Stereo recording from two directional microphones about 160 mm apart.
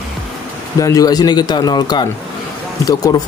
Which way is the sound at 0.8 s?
20° left (ahead or behind).